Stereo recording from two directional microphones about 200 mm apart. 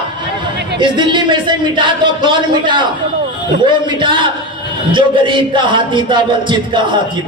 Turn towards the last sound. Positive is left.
turn(degrees=-25)  # may be behind; listen again after turning